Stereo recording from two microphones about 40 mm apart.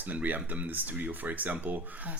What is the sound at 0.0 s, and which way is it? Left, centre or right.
Speech, right.